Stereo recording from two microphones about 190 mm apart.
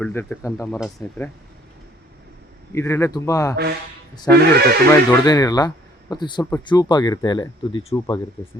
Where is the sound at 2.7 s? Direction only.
15° left (ahead or behind).